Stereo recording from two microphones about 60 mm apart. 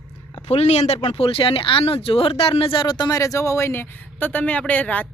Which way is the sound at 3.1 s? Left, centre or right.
Left.